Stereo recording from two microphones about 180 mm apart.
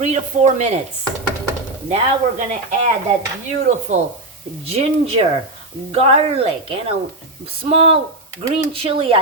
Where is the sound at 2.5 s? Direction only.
40° right (ahead or behind).